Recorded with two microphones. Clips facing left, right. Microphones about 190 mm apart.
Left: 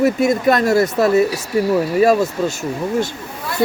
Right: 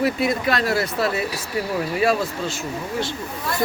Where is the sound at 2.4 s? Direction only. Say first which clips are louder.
Left 7 dB; 45° left (ahead or behind).